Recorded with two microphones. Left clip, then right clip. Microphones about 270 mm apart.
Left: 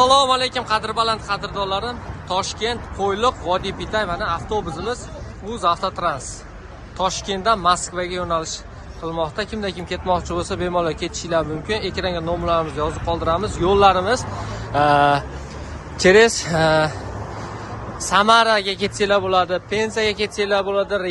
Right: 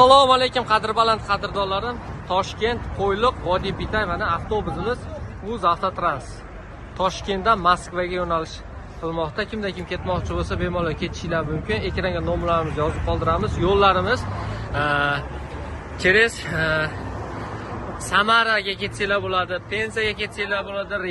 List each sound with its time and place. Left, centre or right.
0.0 s speech: centre
18.0 s speech: centre